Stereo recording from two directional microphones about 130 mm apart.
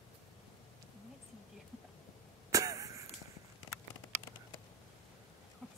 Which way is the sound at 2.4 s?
25° right (ahead or behind).